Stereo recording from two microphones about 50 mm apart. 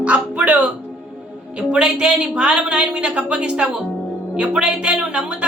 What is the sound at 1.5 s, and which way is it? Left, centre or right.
Speech, centre.